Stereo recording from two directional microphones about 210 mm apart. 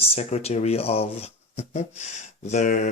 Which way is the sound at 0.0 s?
30° left (ahead or behind).